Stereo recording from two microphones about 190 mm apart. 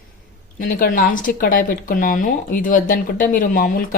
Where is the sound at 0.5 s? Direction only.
50° left (ahead or behind).